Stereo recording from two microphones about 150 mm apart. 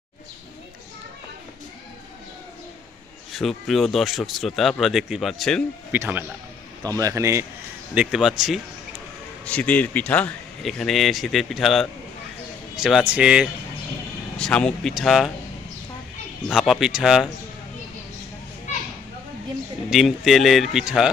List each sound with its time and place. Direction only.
3.3 s speech: centre (ahead or behind)
5.9 s speech: 15° right (ahead or behind)
6.8 s a man's voice: 25° right (ahead or behind)
7.9 s speech: 5° right (ahead or behind)
9.4 s speech: 10° left (ahead or behind)
14.3 s speech: 5° left (ahead or behind)
16.5 s speech: 5° right (ahead or behind)
19.9 s speech: centre (ahead or behind)